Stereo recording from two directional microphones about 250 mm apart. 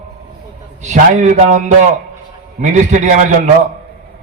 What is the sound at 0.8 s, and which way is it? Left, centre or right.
A man's voice, right.